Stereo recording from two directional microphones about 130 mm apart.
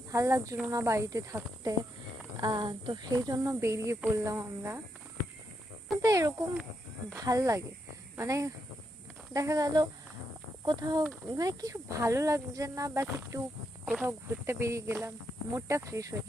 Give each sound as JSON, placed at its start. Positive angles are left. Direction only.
{"t": 0.1, "sound": "speech", "side_deg": -25}
{"t": 6.0, "sound": "speech", "side_deg": -25}
{"t": 13.8, "sound": "speech", "side_deg": -5}
{"t": 14.4, "sound": "speech", "side_deg": -20}